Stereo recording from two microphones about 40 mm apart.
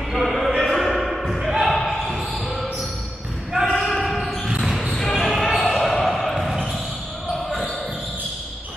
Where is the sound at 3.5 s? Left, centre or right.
Centre.